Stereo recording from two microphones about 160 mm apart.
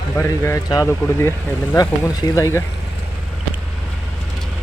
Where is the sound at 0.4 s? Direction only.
20° left (ahead or behind).